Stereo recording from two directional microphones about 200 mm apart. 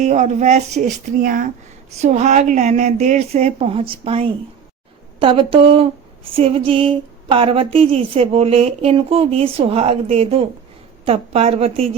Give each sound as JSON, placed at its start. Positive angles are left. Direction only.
{"t": 0.0, "sound": "speech", "side_deg": -35}